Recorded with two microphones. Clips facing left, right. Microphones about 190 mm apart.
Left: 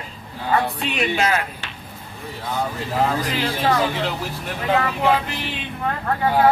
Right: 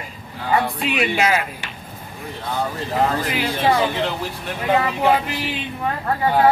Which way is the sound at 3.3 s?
10° right (ahead or behind).